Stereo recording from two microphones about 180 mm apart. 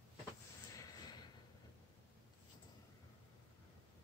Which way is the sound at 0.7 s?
20° left (ahead or behind).